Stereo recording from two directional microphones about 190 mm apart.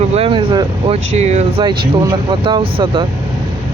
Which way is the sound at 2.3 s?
25° right (ahead or behind).